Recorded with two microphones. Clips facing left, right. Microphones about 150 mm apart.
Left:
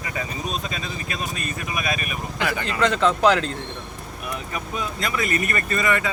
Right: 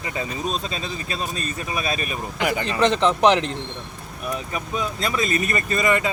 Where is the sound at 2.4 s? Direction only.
20° right (ahead or behind).